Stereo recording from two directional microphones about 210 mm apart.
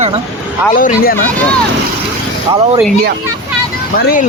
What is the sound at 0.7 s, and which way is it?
Speech, 40° left (ahead or behind).